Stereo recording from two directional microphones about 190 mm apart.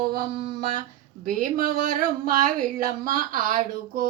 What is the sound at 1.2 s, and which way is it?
Speech, 45° right (ahead or behind).